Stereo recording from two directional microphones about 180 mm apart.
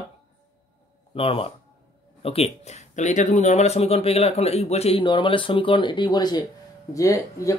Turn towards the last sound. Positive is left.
turn(degrees=20)  # may be behind; listen again after turning